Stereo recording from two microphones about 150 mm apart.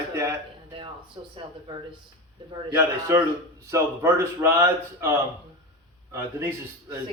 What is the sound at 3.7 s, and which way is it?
Speech, 15° right (ahead or behind).